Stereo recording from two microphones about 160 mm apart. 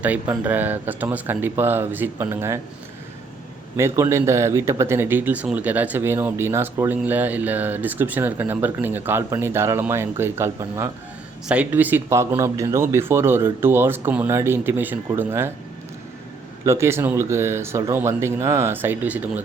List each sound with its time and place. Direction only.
0.0 s speech: 10° right (ahead or behind)
3.8 s speech: 15° right (ahead or behind)
16.6 s speech: 15° right (ahead or behind)